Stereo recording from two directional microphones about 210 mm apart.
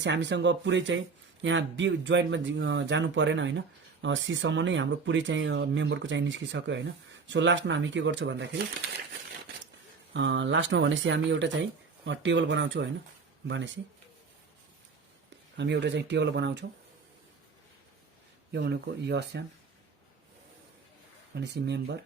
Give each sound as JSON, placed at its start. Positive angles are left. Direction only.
{"t": 0.0, "sound": "speech", "side_deg": -55}
{"t": 10.2, "sound": "speech", "side_deg": -60}
{"t": 15.5, "sound": "speech", "side_deg": -55}
{"t": 18.5, "sound": "speech", "side_deg": -55}
{"t": 21.3, "sound": "speech", "side_deg": -55}